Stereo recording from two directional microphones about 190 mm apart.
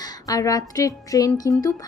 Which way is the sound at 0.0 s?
20° left (ahead or behind).